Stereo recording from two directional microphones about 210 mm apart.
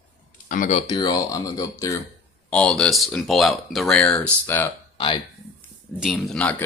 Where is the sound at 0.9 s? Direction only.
20° left (ahead or behind).